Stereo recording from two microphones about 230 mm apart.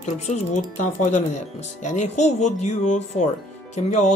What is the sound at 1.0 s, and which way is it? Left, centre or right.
Speech, left.